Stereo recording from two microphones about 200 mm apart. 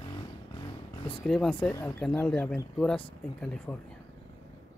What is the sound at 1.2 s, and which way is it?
Speech, 5° left (ahead or behind).